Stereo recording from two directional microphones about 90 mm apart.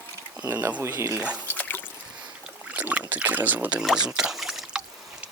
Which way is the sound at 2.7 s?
15° right (ahead or behind).